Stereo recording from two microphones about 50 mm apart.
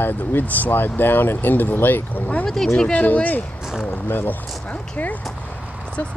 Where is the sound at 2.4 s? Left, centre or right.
Centre.